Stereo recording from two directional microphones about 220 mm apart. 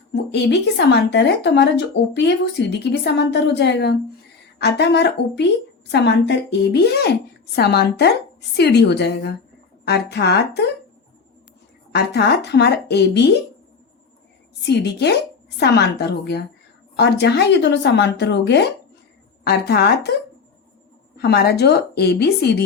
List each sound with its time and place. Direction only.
0.1 s a woman's voice: 50° left (ahead or behind)
11.9 s a woman's voice: 50° left (ahead or behind)
14.7 s a woman's voice: 50° left (ahead or behind)
21.2 s a woman's voice: 50° left (ahead or behind)